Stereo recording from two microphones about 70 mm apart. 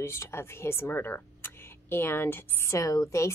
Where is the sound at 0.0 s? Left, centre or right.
Left.